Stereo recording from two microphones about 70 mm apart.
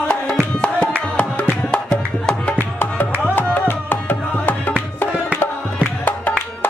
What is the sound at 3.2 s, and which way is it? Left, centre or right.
Music, left.